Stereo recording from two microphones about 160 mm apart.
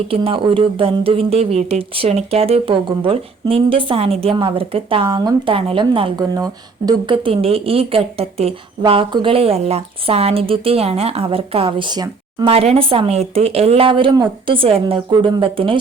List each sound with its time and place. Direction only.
0.1 s speech: 35° right (ahead or behind)
12.5 s speech: 40° right (ahead or behind)